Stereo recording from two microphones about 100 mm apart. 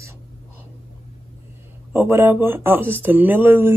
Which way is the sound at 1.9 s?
25° right (ahead or behind).